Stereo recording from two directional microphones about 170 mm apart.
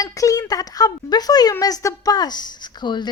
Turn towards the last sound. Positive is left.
turn(degrees=25)  # may be behind; listen again after turning